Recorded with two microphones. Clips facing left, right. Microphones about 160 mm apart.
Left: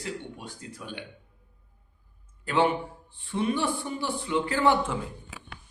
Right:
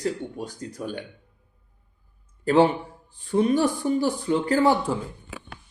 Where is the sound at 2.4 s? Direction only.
35° right (ahead or behind).